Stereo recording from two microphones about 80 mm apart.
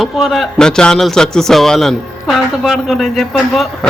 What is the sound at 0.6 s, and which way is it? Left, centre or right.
A man's voice, centre.